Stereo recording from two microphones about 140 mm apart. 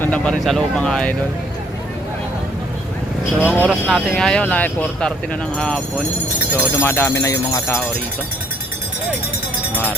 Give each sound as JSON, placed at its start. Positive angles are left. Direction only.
{"t": 0.0, "sound": "speech", "side_deg": 10}
{"t": 3.4, "sound": "speech", "side_deg": 10}
{"t": 6.7, "sound": "speech", "side_deg": 15}